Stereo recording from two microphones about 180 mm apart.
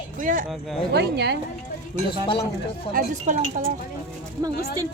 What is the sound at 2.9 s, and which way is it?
Speech, 45° right (ahead or behind).